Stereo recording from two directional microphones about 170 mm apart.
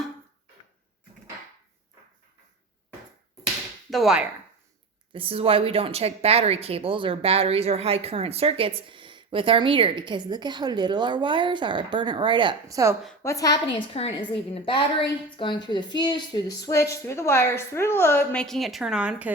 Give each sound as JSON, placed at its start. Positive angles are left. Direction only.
{"t": 3.8, "sound": "speech", "side_deg": 0}
{"t": 5.1, "sound": "speech", "side_deg": -35}
{"t": 13.2, "sound": "a woman's voice", "side_deg": 20}
{"t": 13.7, "sound": "a woman's voice", "side_deg": 35}